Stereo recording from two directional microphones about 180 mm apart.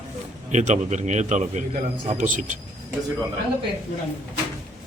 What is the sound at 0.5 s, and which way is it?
A man's voice, 40° right (ahead or behind).